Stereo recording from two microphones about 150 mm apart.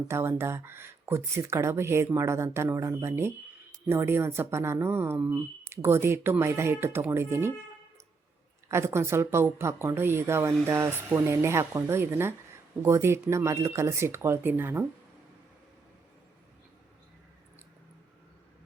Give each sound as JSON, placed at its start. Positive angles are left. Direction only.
{"t": 0.1, "sound": "speech", "side_deg": -15}
{"t": 8.7, "sound": "speech", "side_deg": -15}